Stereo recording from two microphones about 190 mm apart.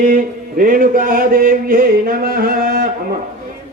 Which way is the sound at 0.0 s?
45° right (ahead or behind).